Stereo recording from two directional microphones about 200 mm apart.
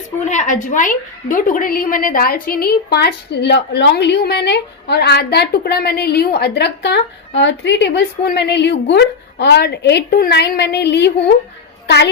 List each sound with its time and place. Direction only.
0.3 s a woman's voice: 40° left (ahead or behind); by 11.1 s 55° left (ahead or behind)